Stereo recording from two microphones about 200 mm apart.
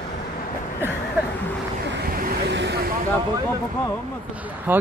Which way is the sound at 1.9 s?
45° right (ahead or behind).